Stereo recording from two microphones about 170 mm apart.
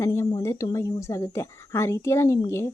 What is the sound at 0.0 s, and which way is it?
Speech, 15° left (ahead or behind).